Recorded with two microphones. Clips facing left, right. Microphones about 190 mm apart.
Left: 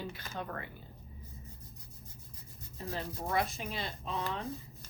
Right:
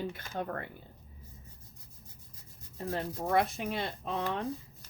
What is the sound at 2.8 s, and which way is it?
Speech, 60° right (ahead or behind).